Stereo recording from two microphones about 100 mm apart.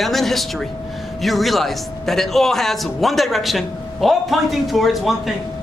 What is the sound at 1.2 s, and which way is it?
A man's voice, centre (ahead or behind).